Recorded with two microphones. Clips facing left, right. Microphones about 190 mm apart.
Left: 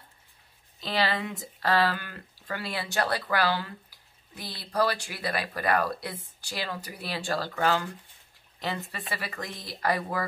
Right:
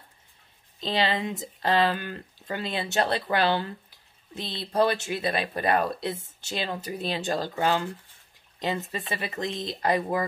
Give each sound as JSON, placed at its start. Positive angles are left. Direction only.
{"t": 0.7, "sound": "speech", "side_deg": -20}